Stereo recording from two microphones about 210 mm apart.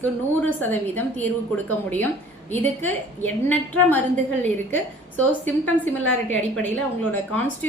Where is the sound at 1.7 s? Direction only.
5° left (ahead or behind).